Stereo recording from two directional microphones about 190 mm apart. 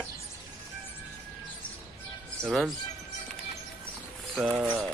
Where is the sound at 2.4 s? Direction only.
Centre (ahead or behind).